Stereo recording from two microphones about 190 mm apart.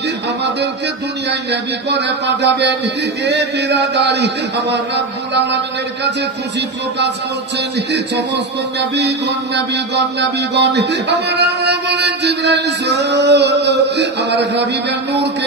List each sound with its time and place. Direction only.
1.5 s speech: 65° right (ahead or behind)
8.7 s speech: 65° right (ahead or behind)
10.5 s speech: 60° right (ahead or behind)